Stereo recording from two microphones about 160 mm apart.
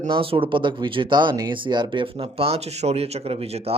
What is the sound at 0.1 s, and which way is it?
A man's voice, 35° right (ahead or behind).